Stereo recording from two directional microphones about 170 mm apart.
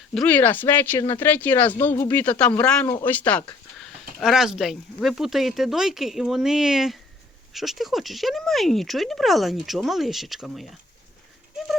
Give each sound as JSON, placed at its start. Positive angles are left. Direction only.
{"t": 0.1, "sound": "speech", "side_deg": 5}